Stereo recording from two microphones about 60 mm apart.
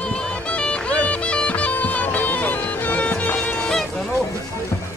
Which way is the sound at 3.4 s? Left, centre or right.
Centre.